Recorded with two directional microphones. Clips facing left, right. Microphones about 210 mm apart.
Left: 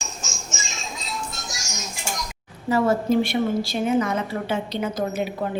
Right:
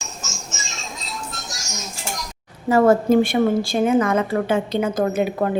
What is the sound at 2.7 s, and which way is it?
A woman's voice, 50° right (ahead or behind).